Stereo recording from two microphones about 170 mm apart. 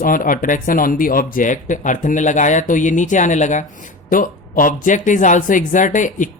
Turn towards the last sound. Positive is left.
turn(degrees=50)  # may be behind; listen again after turning